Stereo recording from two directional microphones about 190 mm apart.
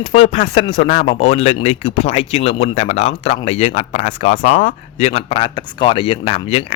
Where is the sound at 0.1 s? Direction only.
30° left (ahead or behind).